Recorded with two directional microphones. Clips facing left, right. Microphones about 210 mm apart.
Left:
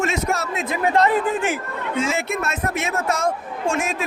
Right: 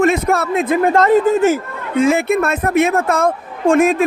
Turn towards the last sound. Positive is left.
turn(degrees=-55)  # may be behind; listen again after turning